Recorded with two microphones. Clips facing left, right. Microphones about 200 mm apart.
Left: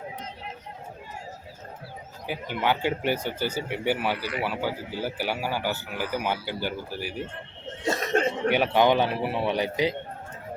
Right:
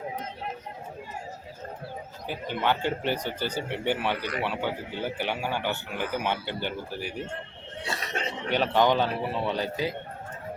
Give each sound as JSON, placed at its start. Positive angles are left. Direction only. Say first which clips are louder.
{"t": 2.2, "sound": "speech", "louder": "left 1 dB", "side_deg": 10}
{"t": 7.9, "sound": "chuckle", "louder": "left 9 dB", "side_deg": 45}
{"t": 8.5, "sound": "speech", "louder": "left 1 dB", "side_deg": 10}